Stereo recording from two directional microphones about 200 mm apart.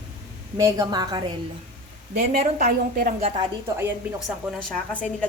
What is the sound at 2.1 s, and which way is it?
A woman's voice, 40° right (ahead or behind).